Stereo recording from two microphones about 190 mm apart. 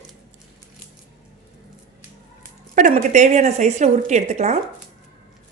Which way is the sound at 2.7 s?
40° right (ahead or behind).